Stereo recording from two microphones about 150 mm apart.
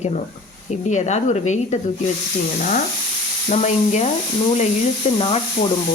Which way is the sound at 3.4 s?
55° left (ahead or behind).